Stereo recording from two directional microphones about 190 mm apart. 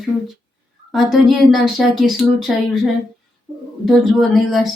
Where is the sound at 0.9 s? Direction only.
Centre (ahead or behind).